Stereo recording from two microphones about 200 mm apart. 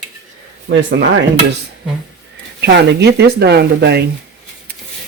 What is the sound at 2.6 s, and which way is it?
Speech, 55° right (ahead or behind).